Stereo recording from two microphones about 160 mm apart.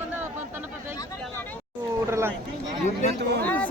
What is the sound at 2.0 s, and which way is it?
Speech, 15° right (ahead or behind).